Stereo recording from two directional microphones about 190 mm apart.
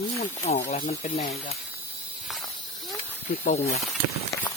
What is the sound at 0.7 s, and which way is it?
Speech, 35° left (ahead or behind).